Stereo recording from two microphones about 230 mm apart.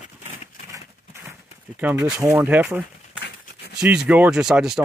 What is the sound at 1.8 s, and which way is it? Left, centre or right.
Speech, centre.